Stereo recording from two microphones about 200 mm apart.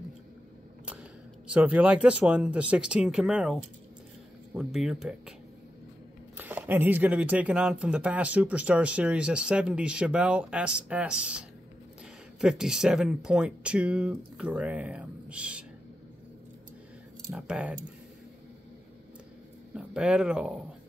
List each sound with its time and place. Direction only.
1.5 s speech: 5° right (ahead or behind)
6.3 s speech: 10° right (ahead or behind)
17.3 s speech: 5° right (ahead or behind)
19.7 s speech: 5° right (ahead or behind)